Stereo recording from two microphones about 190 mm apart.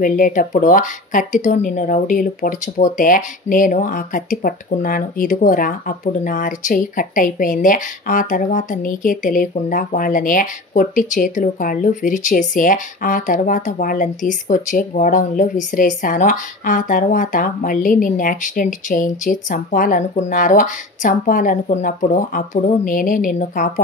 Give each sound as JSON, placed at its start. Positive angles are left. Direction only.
{"t": 0.0, "sound": "speech", "side_deg": 45}